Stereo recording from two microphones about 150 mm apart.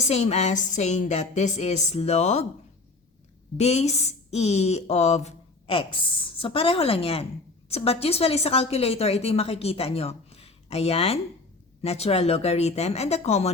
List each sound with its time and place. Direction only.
0.1 s a woman's voice: 45° left (ahead or behind)
3.6 s a woman's voice: 45° left (ahead or behind)